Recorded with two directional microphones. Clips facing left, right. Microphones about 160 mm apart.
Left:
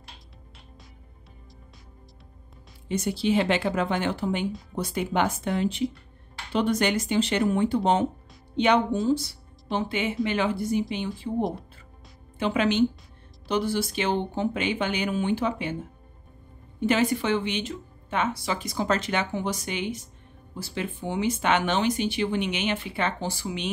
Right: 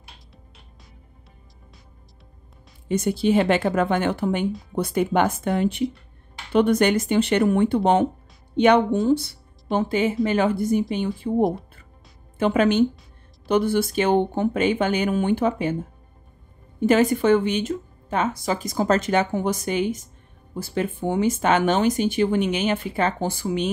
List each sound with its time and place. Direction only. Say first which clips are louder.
2.9 s speech: right 4 dB; 50° right (ahead or behind)
16.8 s speech: right 6 dB; 45° right (ahead or behind)